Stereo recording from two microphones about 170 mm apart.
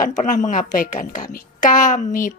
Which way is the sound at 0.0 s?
45° left (ahead or behind).